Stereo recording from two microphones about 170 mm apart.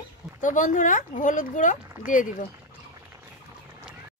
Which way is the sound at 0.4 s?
50° left (ahead or behind).